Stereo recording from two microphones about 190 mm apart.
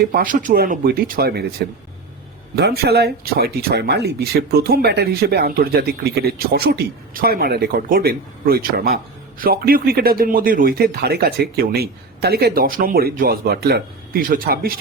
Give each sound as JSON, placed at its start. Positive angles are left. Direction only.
{"t": 0.0, "sound": "speech", "side_deg": -50}